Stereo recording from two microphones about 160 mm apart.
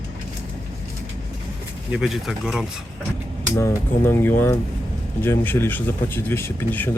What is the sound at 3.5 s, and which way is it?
Speech, 20° left (ahead or behind).